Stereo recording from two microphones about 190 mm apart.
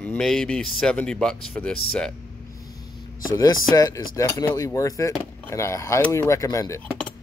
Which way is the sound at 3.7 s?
20° left (ahead or behind).